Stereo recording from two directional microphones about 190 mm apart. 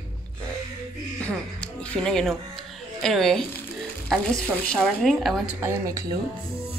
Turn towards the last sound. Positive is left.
turn(degrees=-15)  # may be behind; listen again after turning